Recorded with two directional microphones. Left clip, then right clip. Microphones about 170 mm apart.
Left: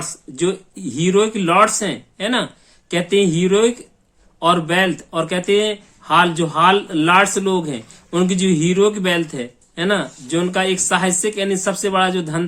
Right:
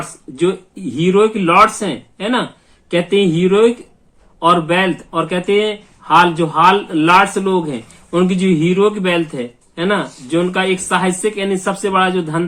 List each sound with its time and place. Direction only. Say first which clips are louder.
0.3 s speech: right 4 dB; 30° left (ahead or behind)